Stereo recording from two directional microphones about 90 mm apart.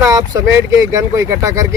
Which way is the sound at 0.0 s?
40° right (ahead or behind).